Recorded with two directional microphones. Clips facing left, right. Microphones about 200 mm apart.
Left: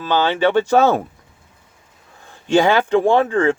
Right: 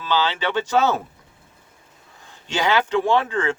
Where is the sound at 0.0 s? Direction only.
50° left (ahead or behind).